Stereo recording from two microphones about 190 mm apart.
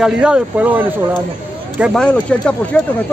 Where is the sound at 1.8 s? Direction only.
5° left (ahead or behind).